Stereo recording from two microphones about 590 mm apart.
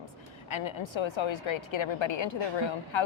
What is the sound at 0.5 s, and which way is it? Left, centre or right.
A woman's voice, left.